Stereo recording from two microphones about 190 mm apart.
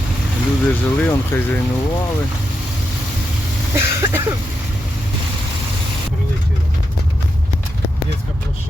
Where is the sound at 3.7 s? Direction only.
15° right (ahead or behind).